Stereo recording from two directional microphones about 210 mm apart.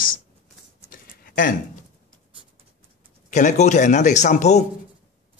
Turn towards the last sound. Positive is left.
turn(degrees=35)  # may be behind; listen again after turning